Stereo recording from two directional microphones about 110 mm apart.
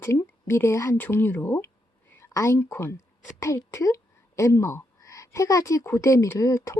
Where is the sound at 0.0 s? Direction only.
25° left (ahead or behind).